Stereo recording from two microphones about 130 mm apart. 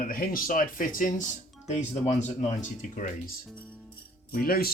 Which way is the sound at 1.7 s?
60° left (ahead or behind).